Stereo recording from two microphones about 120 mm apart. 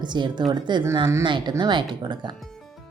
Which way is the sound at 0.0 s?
40° right (ahead or behind).